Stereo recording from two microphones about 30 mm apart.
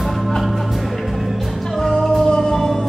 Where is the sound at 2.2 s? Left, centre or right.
Left.